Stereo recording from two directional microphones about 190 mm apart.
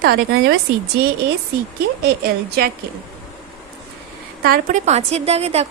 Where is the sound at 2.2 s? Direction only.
55° right (ahead or behind).